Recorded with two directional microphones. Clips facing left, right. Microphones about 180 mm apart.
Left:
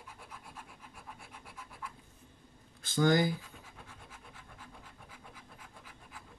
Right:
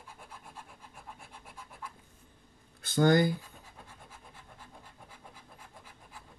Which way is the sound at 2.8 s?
60° right (ahead or behind).